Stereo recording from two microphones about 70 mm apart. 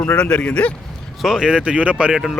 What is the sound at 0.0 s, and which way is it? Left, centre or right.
Speech, centre.